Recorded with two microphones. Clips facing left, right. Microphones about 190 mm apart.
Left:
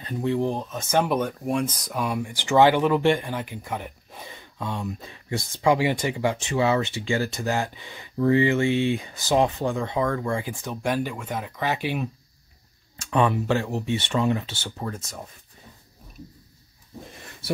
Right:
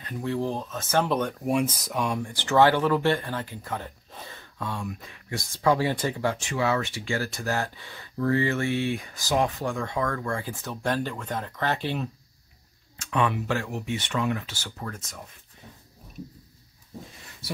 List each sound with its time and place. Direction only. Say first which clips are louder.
0.0 s speech: left 4 dB; 20° left (ahead or behind)
1.4 s speech: right 1 dB; 5° right (ahead or behind); by 5.4 s 25° left (ahead or behind)
5.6 s speech: left 2 dB; 15° left (ahead or behind)
12.9 s speech: left 4 dB; 35° left (ahead or behind)